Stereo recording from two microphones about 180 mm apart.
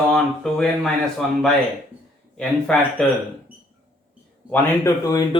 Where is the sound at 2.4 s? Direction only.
5° left (ahead or behind).